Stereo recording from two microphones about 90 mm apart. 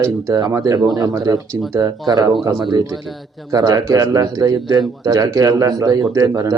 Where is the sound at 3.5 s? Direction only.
45° right (ahead or behind).